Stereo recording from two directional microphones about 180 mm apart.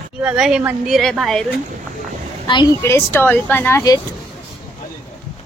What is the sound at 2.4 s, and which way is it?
Speech, 25° left (ahead or behind).